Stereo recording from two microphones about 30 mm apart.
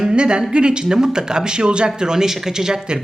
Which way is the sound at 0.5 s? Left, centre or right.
Right.